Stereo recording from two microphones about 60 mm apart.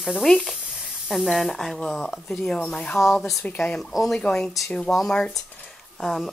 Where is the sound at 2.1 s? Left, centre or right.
Centre.